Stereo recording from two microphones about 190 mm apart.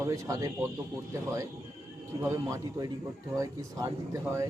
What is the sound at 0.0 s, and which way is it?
Speech, 15° right (ahead or behind).